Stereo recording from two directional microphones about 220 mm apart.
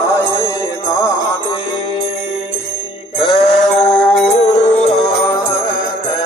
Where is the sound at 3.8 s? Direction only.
5° left (ahead or behind).